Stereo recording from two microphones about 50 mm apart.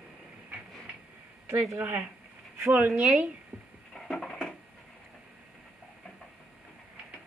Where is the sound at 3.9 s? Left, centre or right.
Centre.